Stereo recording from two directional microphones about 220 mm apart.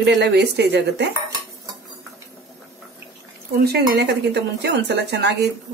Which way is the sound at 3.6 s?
50° right (ahead or behind).